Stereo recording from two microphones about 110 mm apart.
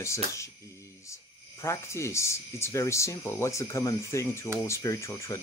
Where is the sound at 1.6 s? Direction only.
25° left (ahead or behind).